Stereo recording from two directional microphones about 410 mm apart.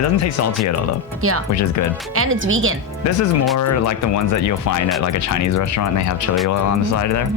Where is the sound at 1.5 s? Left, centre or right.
Left.